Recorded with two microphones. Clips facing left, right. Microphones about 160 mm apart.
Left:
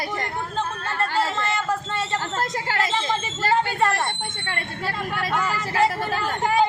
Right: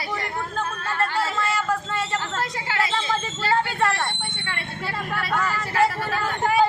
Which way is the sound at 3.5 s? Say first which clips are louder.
Left 1 dB; 20° left (ahead or behind).